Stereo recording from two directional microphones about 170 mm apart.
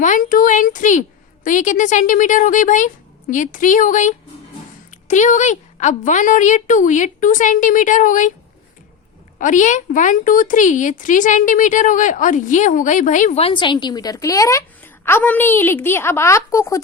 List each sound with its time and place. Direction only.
0.0 s a sound: 50° left (ahead or behind)
1.5 s a woman's voice: 50° left (ahead or behind)
9.4 s a woman's voice: 45° left (ahead or behind); by 16.8 s 15° left (ahead or behind)